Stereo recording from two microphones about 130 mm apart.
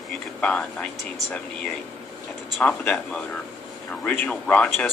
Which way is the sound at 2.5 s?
10° left (ahead or behind).